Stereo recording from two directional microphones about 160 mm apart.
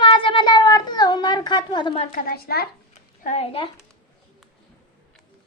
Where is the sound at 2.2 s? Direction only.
70° left (ahead or behind).